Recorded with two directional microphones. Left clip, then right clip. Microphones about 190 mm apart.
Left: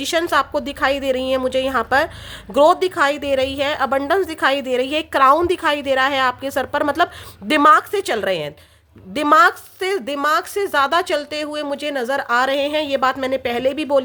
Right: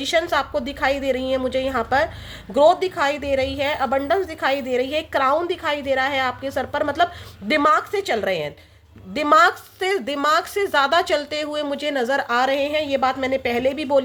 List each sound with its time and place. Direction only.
0.0 s a woman's voice: 25° left (ahead or behind)